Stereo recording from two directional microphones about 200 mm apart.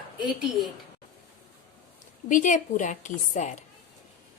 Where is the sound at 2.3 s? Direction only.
40° left (ahead or behind).